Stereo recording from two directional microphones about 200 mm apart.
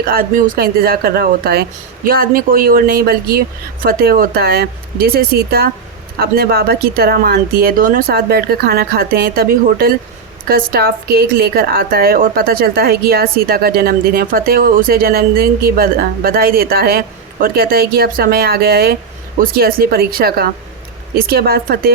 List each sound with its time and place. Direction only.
0.0 s a woman's voice: 45° right (ahead or behind)